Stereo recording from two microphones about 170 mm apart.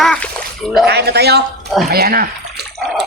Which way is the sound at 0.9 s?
75° right (ahead or behind).